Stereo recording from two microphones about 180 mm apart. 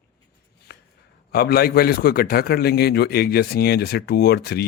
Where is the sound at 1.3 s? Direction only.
60° left (ahead or behind).